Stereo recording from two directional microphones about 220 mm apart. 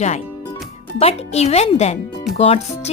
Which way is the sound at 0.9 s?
30° left (ahead or behind).